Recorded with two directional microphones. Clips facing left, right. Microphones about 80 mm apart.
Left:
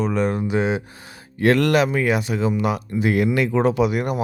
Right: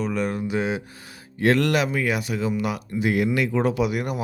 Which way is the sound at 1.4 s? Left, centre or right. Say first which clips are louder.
Left 3 dB; left.